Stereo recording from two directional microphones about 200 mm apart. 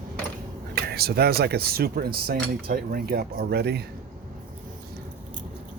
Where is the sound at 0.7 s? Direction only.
50° right (ahead or behind).